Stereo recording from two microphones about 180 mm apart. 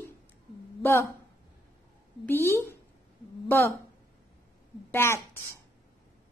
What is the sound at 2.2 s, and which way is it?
A woman's voice, 10° left (ahead or behind).